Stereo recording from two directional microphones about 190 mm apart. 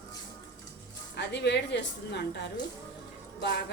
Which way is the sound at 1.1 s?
65° left (ahead or behind).